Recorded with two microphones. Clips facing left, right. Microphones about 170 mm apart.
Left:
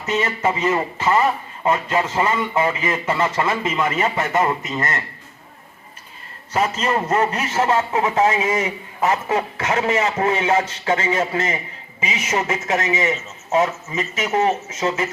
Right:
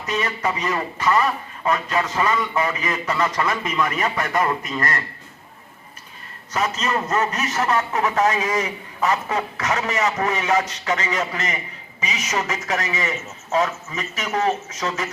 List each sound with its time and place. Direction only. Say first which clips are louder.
0.0 s a man's voice: left 3 dB; 25° left (ahead or behind)
6.5 s a man's voice: left 3 dB; 30° left (ahead or behind)